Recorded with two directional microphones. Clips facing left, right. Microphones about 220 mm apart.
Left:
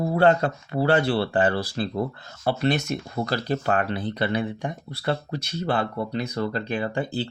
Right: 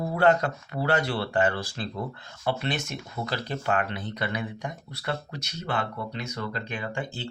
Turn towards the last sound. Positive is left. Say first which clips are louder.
# left 7 dB
turn(degrees=35)  # may be behind; listen again after turning